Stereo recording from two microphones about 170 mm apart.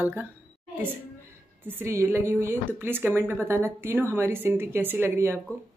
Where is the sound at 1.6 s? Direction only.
15° right (ahead or behind).